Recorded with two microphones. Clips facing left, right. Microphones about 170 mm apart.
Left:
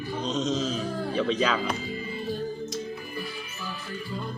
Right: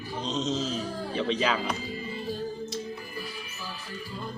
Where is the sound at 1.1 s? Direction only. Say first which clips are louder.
Left 2 dB; 25° right (ahead or behind).